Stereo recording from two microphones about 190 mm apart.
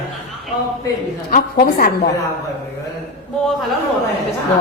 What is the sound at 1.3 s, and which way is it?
Speech, 50° left (ahead or behind).